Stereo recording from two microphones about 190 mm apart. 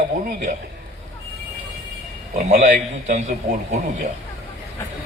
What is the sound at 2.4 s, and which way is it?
Speech, 35° right (ahead or behind).